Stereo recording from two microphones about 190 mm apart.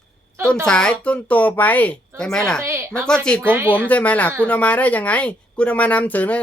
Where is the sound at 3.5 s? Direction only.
10° right (ahead or behind).